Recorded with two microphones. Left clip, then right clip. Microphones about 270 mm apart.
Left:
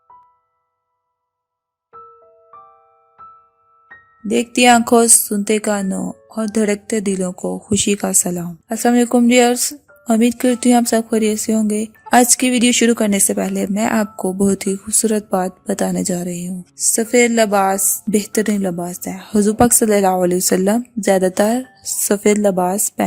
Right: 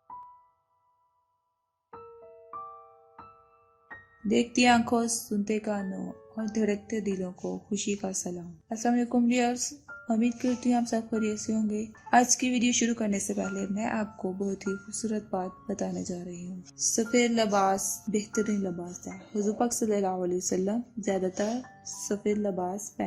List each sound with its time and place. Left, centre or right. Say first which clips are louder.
4.3 s a woman's voice: left 11 dB; left
16.9 s a woman's voice: left 12 dB; left